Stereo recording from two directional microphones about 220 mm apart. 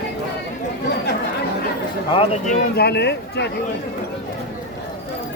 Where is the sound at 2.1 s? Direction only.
30° left (ahead or behind); by 3.5 s 50° left (ahead or behind).